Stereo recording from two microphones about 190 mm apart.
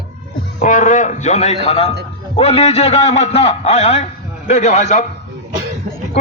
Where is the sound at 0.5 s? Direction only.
40° left (ahead or behind).